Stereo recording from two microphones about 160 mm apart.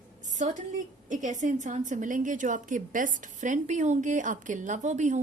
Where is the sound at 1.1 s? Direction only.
50° right (ahead or behind).